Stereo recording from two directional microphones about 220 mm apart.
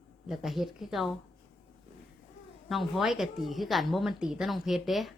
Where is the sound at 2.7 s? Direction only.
Centre (ahead or behind).